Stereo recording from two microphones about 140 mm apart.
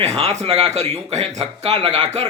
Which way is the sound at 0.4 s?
50° right (ahead or behind).